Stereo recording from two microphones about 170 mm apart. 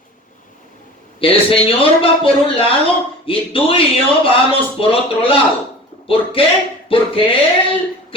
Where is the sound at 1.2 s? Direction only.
35° left (ahead or behind).